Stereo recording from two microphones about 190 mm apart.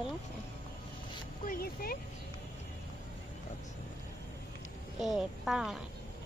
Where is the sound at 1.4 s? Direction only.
50° left (ahead or behind).